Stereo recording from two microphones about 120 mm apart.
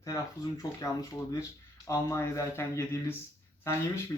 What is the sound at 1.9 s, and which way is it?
Speech, 25° left (ahead or behind).